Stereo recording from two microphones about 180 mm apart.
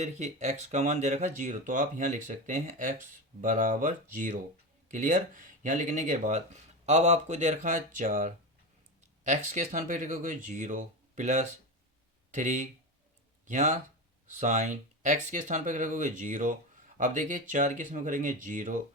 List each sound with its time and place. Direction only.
0.0 s speech: 40° right (ahead or behind)